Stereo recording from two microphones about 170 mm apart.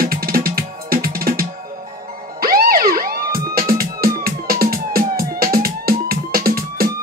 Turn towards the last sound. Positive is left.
turn(degrees=-60)  # may be behind; listen again after turning